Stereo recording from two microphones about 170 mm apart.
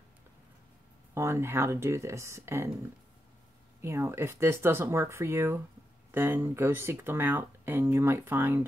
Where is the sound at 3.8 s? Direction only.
15° right (ahead or behind).